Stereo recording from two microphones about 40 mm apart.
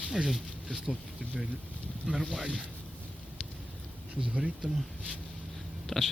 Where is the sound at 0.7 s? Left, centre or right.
Right.